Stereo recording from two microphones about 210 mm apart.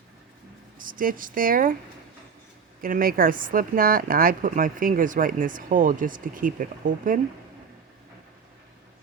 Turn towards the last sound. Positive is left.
turn(degrees=-40)  # may be behind; listen again after turning